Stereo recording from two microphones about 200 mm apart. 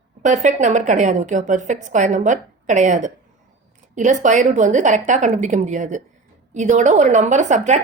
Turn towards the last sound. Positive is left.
turn(degrees=-35)  # may be behind; listen again after turning